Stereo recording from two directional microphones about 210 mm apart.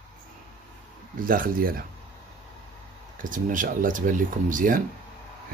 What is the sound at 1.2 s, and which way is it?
Speech, 40° right (ahead or behind).